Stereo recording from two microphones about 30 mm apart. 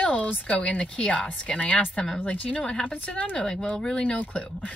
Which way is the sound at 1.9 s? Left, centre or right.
Left.